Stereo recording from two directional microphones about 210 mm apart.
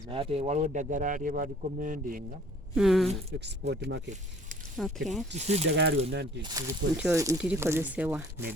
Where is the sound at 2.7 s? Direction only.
Centre (ahead or behind).